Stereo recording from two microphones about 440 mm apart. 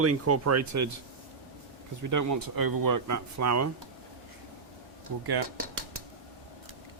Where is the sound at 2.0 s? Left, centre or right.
Right.